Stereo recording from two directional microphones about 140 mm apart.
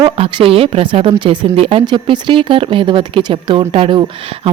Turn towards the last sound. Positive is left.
turn(degrees=-40)  # may be behind; listen again after turning